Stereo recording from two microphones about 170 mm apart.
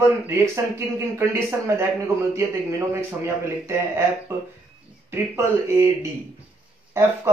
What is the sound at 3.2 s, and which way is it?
A man's voice, 15° right (ahead or behind).